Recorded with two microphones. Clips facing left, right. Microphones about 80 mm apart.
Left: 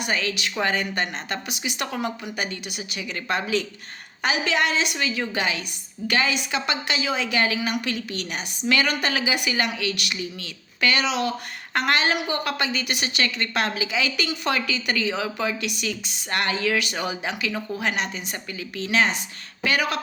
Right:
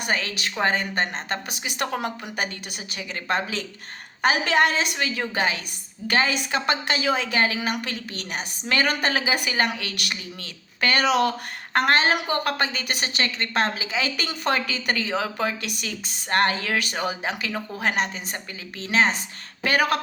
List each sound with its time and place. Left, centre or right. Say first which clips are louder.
0.0 s a woman's voice: even; right
19.6 s speech: right 2 dB; right